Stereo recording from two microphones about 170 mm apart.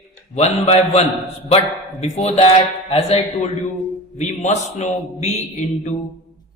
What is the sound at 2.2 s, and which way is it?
A man's voice, 40° left (ahead or behind).